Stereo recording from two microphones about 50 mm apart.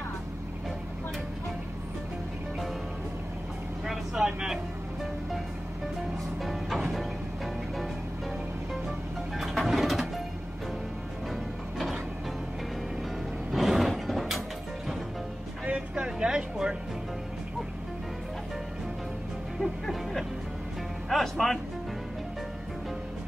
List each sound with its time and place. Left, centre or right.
3.8 s vehicle: centre
6.4 s music: centre
9.4 s music: centre
13.5 s a sound: centre
15.9 s a sound: centre
19.6 s music: centre